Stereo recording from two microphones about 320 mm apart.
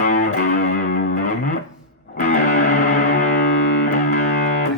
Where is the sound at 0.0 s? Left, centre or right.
Left.